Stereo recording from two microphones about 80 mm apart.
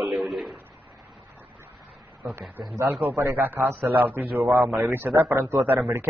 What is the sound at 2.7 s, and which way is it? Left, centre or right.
A man's voice, right.